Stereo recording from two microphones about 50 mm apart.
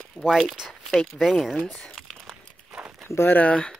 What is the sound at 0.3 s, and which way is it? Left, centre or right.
Speech, centre.